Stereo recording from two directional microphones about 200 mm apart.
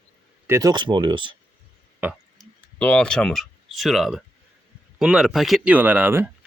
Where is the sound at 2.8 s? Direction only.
5° left (ahead or behind).